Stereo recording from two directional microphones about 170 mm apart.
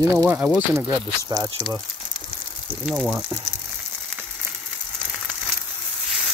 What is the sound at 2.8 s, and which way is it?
Speech, 5° right (ahead or behind).